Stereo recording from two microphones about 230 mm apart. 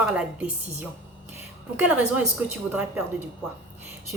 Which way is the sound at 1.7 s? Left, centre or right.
Centre.